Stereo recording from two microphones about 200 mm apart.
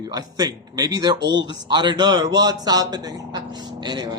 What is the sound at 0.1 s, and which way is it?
A man's voice, 20° right (ahead or behind).